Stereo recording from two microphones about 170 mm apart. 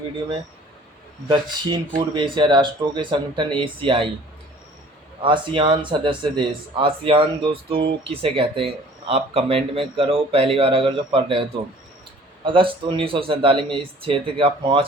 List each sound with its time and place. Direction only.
1.3 s speech: 25° right (ahead or behind)
5.2 s speech: 30° right (ahead or behind)
12.5 s speech: 30° right (ahead or behind)